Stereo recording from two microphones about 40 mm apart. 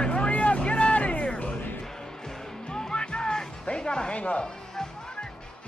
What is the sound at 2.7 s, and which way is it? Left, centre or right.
Music, left.